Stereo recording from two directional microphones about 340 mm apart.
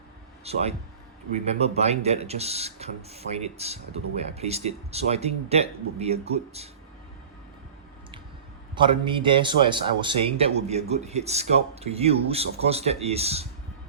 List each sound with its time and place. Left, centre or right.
0.4 s speech: centre
8.7 s speech: centre